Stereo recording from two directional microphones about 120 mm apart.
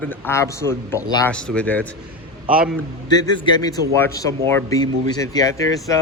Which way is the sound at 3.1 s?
35° left (ahead or behind).